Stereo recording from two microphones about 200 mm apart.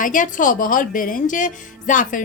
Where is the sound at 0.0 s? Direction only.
40° left (ahead or behind).